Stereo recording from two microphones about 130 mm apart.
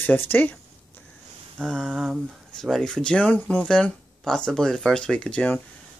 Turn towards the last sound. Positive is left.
turn(degrees=10)  # may be behind; listen again after turning